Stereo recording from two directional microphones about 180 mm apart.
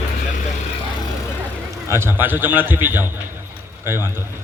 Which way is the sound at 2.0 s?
10° right (ahead or behind).